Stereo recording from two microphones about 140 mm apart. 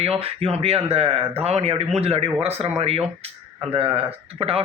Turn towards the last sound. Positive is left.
turn(degrees=-45)  # may be behind; listen again after turning